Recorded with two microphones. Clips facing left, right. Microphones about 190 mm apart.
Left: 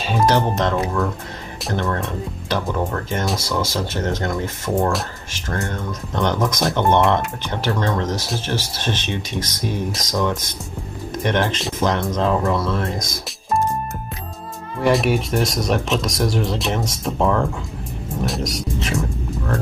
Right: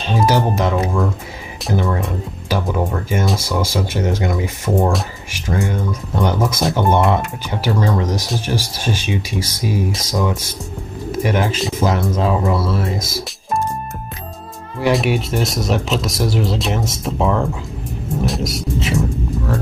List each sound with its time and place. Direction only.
0.3 s speech: 10° right (ahead or behind)
14.8 s speech: centre (ahead or behind)